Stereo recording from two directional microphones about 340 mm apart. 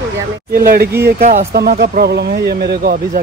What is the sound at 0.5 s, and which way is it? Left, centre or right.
Speech, right.